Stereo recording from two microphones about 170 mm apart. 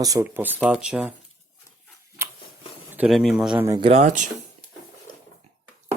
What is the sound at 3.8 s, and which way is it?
Speech, 40° right (ahead or behind).